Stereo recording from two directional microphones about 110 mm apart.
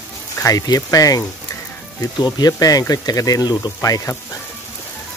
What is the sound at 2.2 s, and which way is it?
Speech, 35° left (ahead or behind).